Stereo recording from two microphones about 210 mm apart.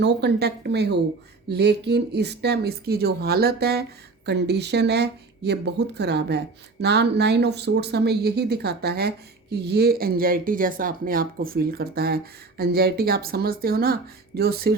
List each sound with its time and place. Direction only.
0.0 s speech: 55° right (ahead or behind)